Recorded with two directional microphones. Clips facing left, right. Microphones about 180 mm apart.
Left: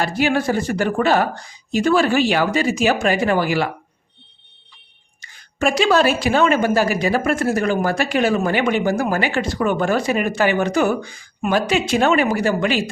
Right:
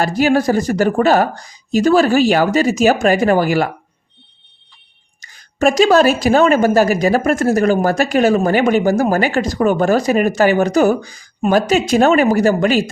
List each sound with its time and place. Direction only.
0.0 s speech: 40° right (ahead or behind)
5.2 s speech: 40° right (ahead or behind)